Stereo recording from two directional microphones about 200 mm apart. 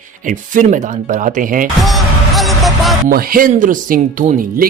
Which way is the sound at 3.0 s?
45° right (ahead or behind).